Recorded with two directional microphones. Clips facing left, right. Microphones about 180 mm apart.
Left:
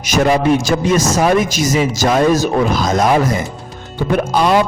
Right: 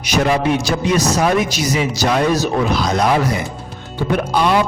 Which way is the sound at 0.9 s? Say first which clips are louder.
Left 2 dB; 45° left (ahead or behind).